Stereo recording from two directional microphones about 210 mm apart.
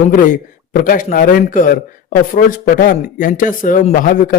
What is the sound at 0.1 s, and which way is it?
A man's voice, 40° left (ahead or behind).